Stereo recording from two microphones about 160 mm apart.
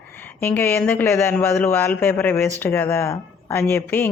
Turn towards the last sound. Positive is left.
turn(degrees=15)  # may be behind; listen again after turning